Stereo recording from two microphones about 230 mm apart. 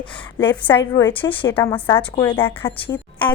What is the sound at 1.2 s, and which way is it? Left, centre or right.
Speech, left.